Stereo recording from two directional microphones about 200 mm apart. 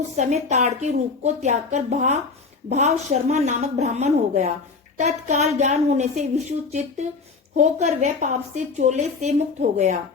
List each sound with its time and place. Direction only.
0.2 s a woman's voice: 35° right (ahead or behind)